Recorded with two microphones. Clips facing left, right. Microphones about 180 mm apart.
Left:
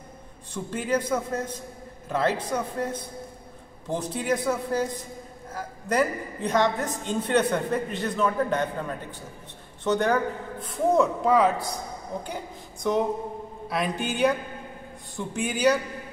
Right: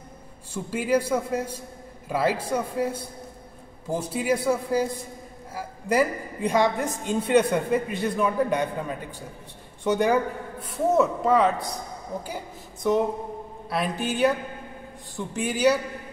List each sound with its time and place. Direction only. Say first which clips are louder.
0.5 s a woman's voice: right 3 dB; 10° right (ahead or behind)